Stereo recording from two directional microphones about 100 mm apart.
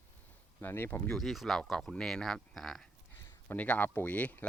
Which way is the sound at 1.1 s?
Centre (ahead or behind).